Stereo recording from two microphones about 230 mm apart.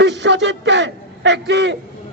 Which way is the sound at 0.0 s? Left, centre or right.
Right.